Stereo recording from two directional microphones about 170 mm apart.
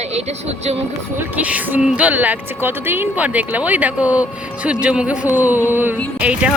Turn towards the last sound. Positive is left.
turn(degrees=-10)  # may be behind; listen again after turning